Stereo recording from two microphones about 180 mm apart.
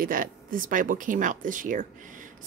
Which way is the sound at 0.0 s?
50° right (ahead or behind).